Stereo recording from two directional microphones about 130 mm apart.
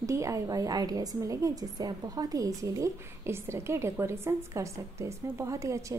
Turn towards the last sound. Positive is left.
turn(degrees=-25)  # may be behind; listen again after turning